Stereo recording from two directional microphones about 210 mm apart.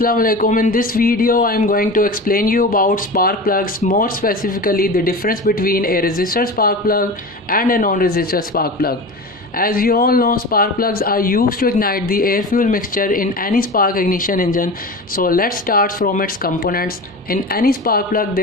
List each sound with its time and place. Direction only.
0.0 s a man's voice: 45° left (ahead or behind)